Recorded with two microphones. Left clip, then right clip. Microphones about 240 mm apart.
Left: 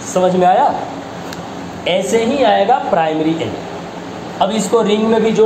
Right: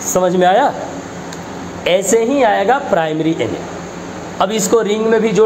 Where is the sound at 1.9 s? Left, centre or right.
Right.